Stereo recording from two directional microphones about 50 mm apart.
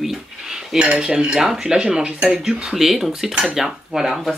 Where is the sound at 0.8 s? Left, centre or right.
Centre.